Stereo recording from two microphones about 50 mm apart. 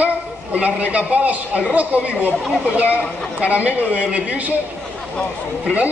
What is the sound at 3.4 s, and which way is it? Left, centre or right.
Speech, right.